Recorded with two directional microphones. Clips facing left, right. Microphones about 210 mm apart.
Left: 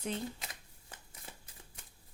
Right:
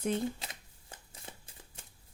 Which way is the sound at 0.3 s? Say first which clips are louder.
Right 2 dB; 30° right (ahead or behind).